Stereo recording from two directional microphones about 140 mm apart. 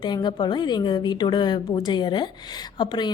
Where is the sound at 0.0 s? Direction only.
30° left (ahead or behind).